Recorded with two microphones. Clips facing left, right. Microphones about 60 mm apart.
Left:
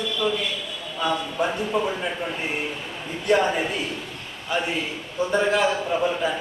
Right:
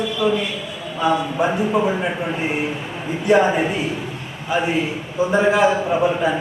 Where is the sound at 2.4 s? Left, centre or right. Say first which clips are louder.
Right 6 dB; centre.